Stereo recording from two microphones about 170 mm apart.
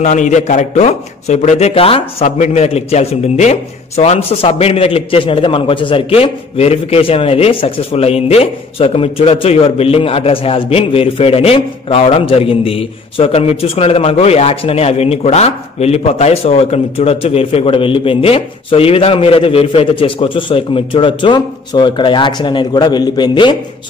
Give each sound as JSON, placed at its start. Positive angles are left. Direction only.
{"t": 0.0, "sound": "a man's voice", "side_deg": 45}